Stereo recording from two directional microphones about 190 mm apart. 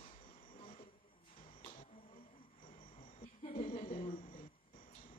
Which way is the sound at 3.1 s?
35° left (ahead or behind).